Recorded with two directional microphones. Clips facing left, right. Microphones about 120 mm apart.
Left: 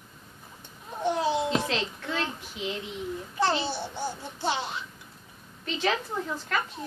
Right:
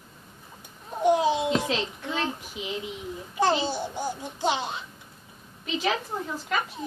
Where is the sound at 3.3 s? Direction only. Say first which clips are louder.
Right 3 dB; 15° right (ahead or behind).